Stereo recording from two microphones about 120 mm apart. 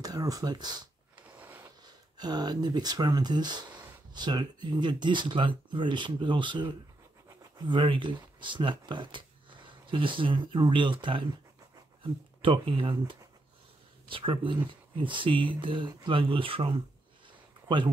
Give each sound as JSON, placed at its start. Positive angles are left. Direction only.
{"t": 0.0, "sound": "speech", "side_deg": -30}
{"t": 2.1, "sound": "speech", "side_deg": -35}